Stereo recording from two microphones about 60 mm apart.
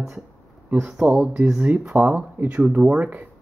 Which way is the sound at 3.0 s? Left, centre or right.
Right.